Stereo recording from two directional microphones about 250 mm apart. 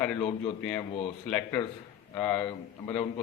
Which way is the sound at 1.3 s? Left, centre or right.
Centre.